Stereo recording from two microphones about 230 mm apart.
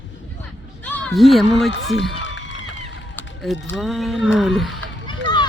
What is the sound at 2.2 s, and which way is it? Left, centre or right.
Crowd, left.